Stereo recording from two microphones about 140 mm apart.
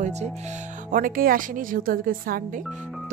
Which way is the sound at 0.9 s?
75° right (ahead or behind).